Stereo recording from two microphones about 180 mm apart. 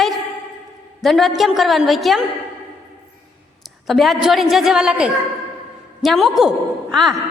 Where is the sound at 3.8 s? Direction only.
Centre (ahead or behind).